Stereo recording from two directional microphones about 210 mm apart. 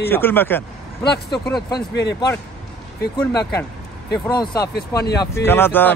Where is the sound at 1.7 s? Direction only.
50° left (ahead or behind).